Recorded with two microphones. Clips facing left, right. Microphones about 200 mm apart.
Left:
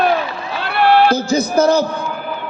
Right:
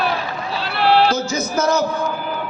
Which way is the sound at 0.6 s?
55° left (ahead or behind).